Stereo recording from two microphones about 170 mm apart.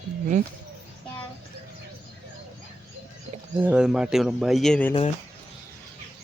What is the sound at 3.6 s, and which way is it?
A man's voice, 5° right (ahead or behind).